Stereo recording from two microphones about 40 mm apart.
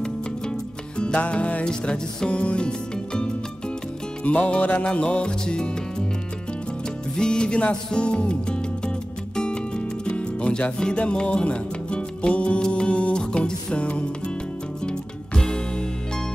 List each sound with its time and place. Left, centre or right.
0.0 s music: left
1.1 s music: left
4.2 s music: left
5.1 s music: left
7.2 s music: left
14.9 s music: centre